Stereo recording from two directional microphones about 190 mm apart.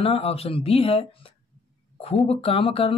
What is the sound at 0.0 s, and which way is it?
Speech, 30° left (ahead or behind).